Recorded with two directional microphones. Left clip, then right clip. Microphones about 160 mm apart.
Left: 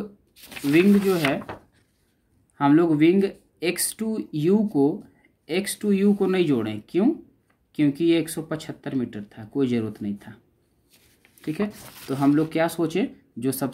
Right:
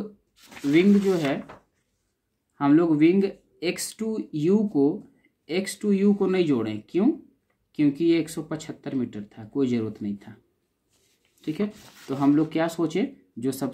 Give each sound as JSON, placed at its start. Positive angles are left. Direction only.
{"t": 1.0, "sound": "speech", "side_deg": 20}
{"t": 2.5, "sound": "speech", "side_deg": 25}
{"t": 11.4, "sound": "speech", "side_deg": 20}